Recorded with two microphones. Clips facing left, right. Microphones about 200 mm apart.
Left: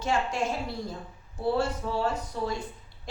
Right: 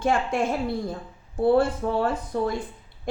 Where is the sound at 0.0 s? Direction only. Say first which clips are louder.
Right 5 dB; 55° right (ahead or behind).